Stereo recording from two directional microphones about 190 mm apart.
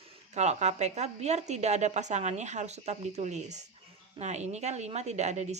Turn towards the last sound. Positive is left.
turn(degrees=-35)  # may be behind; listen again after turning